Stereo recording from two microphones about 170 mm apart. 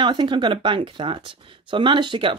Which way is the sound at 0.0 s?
25° right (ahead or behind).